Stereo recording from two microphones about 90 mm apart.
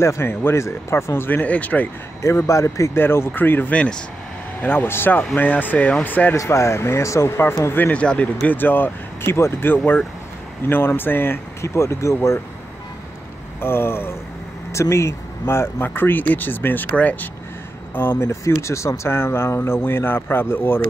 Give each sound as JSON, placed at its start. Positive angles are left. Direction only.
{"t": 0.0, "sound": "speech", "side_deg": 30}
{"t": 2.2, "sound": "speech", "side_deg": 35}
{"t": 6.3, "sound": "speech", "side_deg": 35}
{"t": 13.6, "sound": "speech", "side_deg": 25}